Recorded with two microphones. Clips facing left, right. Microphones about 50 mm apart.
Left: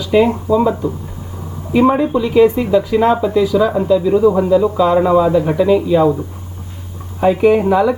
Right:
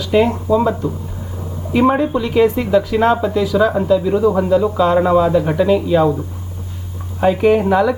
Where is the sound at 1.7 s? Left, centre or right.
Centre.